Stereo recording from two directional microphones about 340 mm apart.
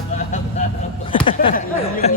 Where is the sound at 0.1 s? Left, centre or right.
Left.